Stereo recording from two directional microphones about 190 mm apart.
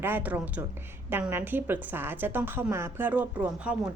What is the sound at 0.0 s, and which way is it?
A woman's voice, 10° right (ahead or behind).